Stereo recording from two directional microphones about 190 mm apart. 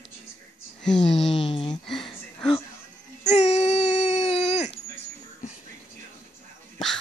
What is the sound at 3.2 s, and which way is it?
Baby cry, 35° left (ahead or behind).